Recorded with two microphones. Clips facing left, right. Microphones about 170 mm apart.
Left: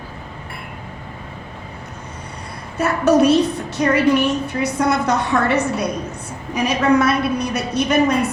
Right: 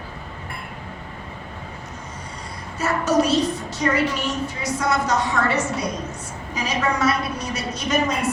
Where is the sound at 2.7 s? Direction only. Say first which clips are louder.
Left 5 dB; 60° left (ahead or behind).